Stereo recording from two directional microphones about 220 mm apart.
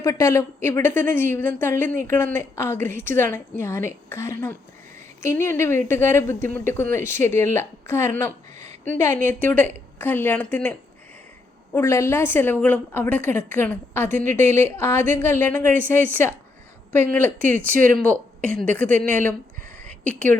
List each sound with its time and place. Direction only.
0.0 s a woman's voice: 15° left (ahead or behind)
16.9 s a woman's voice: 10° left (ahead or behind)
19.6 s a sound: 35° right (ahead or behind)
20.1 s a woman's voice: 5° left (ahead or behind)